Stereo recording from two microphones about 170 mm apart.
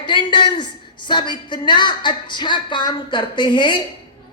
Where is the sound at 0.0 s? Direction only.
25° left (ahead or behind).